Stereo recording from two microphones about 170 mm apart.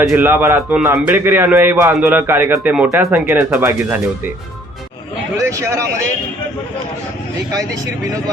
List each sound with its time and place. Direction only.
0.1 s a man's voice: 15° right (ahead or behind)
5.5 s a man's voice: 20° right (ahead or behind)
7.5 s speech: 20° right (ahead or behind)